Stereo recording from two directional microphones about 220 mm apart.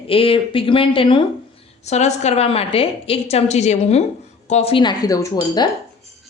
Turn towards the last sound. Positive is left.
turn(degrees=20)  # may be behind; listen again after turning